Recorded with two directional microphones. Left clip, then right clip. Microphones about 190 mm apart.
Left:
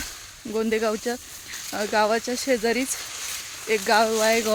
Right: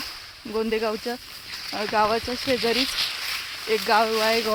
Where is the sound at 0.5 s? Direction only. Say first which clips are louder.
Left 1 dB; 20° left (ahead or behind).